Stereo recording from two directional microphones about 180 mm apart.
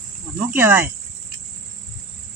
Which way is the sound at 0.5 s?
10° right (ahead or behind).